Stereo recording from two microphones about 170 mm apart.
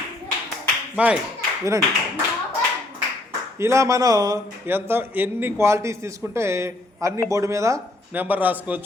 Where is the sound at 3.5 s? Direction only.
15° right (ahead or behind).